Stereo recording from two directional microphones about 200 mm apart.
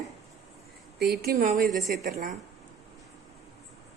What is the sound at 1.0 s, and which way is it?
Speech, 50° right (ahead or behind).